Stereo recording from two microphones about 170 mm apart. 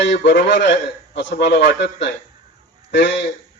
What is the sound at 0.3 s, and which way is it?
A man's voice, 90° left.